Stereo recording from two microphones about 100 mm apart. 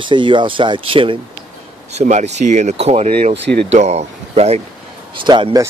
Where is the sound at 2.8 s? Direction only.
85° right.